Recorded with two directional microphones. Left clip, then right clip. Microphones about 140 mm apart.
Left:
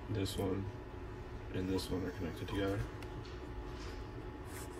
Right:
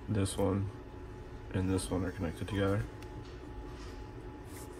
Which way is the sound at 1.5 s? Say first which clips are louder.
Right 4 dB; 40° right (ahead or behind).